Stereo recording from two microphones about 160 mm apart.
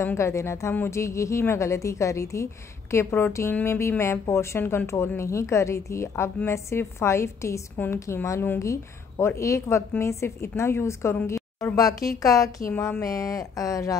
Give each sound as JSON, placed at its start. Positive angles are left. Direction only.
{"t": 0.0, "sound": "a woman's voice", "side_deg": 15}